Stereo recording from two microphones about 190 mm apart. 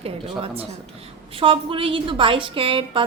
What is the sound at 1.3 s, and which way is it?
A woman's voice, 30° right (ahead or behind).